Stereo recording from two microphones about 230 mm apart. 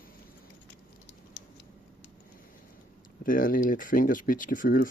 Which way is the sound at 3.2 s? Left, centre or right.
Left.